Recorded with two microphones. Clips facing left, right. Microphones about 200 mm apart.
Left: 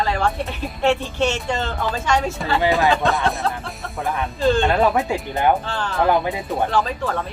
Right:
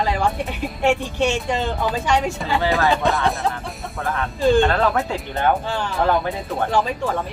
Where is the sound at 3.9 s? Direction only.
15° left (ahead or behind).